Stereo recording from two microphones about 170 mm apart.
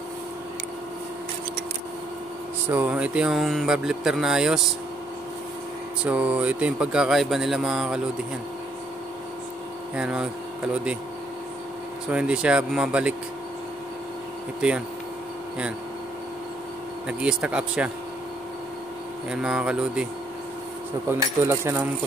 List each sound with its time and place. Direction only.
2.7 s speech: 10° right (ahead or behind)
6.0 s speech: 10° right (ahead or behind)
9.9 s speech: 5° right (ahead or behind)
12.1 s speech: 5° right (ahead or behind)
17.2 s speech: 5° right (ahead or behind)
19.3 s speech: 5° right (ahead or behind)
21.1 s speech: 15° right (ahead or behind)